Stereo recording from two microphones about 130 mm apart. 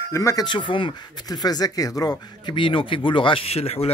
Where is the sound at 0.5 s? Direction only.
40° left (ahead or behind).